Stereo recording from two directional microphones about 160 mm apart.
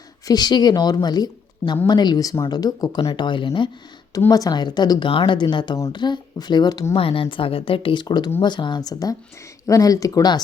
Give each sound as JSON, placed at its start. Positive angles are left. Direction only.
{"t": 0.3, "sound": "speech", "side_deg": 25}